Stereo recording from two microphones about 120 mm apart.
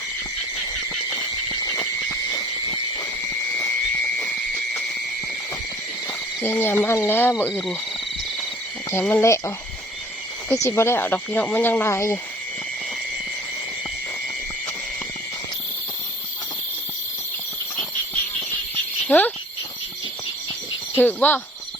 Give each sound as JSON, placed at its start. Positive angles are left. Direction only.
{"t": 6.4, "sound": "speech", "side_deg": 20}
{"t": 7.5, "sound": "speech", "side_deg": 0}
{"t": 8.9, "sound": "speech", "side_deg": 20}
{"t": 10.5, "sound": "speech", "side_deg": 25}
{"t": 19.0, "sound": "speech", "side_deg": 15}
{"t": 20.9, "sound": "speech", "side_deg": 15}